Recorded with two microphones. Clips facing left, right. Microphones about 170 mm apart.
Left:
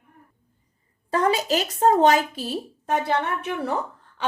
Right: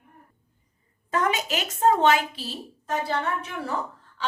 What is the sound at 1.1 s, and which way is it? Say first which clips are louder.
A woman's voice: left 4 dB; 35° left (ahead or behind).